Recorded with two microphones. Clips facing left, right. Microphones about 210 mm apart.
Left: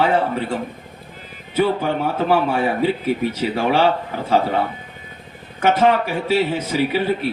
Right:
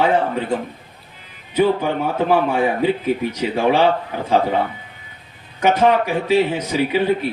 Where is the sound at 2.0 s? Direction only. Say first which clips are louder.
Right 1 dB; 10° left (ahead or behind).